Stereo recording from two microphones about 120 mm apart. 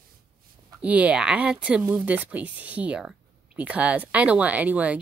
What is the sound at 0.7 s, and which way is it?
Speech, 10° right (ahead or behind).